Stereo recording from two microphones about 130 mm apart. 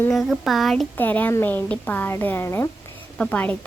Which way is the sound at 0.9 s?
15° left (ahead or behind).